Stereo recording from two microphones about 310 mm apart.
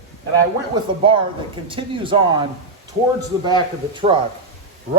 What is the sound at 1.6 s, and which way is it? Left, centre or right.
Speech, centre.